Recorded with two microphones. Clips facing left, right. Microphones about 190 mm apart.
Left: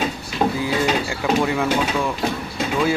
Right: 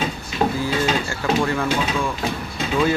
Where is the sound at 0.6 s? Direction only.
15° left (ahead or behind).